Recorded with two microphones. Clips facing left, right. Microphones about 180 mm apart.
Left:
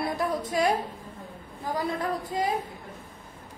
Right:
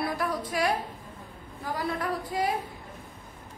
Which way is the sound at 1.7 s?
20° left (ahead or behind).